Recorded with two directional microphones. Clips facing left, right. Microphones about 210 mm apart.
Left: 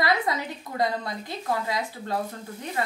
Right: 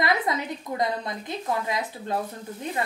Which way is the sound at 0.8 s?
20° right (ahead or behind).